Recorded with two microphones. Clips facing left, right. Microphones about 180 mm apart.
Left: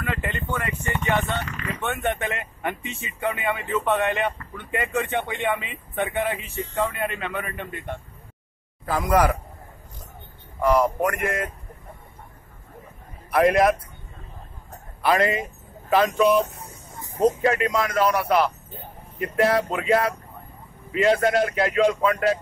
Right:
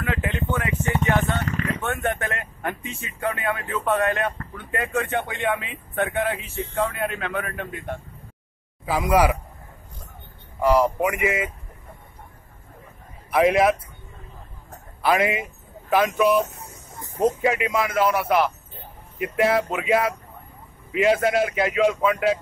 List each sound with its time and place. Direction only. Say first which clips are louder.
0.0 s a sound: right 2 dB; centre (ahead or behind)
1.0 s speech: even; centre (ahead or behind)
10.6 s speech: right 1 dB; 10° right (ahead or behind)
13.3 s speech: even; centre (ahead or behind)
15.0 s speech: even; 5° right (ahead or behind)